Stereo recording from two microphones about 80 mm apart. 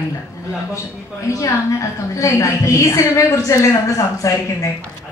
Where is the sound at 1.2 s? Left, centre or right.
Left.